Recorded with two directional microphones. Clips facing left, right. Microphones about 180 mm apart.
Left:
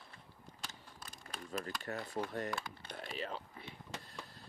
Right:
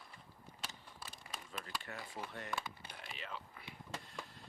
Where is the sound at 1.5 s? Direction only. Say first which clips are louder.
Left 7 dB; 45° left (ahead or behind).